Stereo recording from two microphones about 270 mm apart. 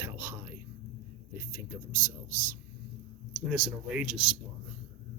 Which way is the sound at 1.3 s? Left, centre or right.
Centre.